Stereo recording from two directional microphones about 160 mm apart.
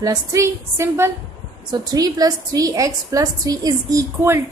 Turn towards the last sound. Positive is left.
turn(degrees=-20)  # may be behind; listen again after turning